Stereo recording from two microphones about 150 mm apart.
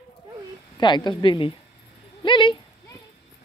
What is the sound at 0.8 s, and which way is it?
Speech, 30° left (ahead or behind).